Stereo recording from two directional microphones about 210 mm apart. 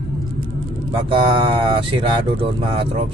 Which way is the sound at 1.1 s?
25° right (ahead or behind).